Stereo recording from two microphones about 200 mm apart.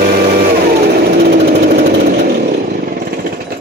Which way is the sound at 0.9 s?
55° right (ahead or behind).